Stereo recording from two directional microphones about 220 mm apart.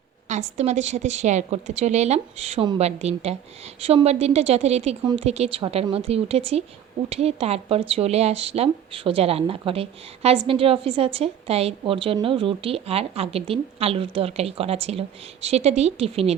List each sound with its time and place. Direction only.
0.3 s a woman's voice: 30° right (ahead or behind)